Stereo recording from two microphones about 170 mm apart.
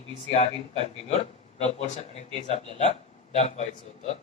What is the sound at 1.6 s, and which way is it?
Speech, 40° left (ahead or behind).